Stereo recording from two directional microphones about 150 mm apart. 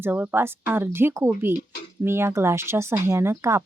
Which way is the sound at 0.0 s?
10° right (ahead or behind).